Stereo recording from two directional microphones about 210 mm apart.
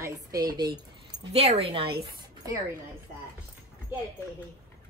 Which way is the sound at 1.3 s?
30° right (ahead or behind).